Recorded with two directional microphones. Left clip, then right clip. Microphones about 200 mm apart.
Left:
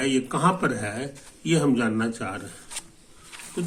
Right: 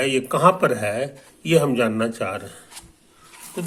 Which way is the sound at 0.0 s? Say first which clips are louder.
Right 6 dB; 30° right (ahead or behind).